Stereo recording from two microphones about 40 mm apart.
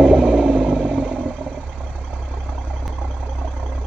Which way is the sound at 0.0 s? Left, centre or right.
Centre.